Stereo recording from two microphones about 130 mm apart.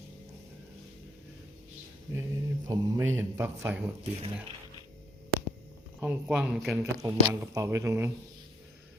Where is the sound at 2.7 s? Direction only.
20° right (ahead or behind).